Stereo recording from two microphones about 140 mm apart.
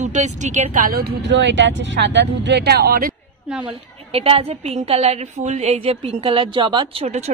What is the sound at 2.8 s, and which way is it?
Speech, 90° right.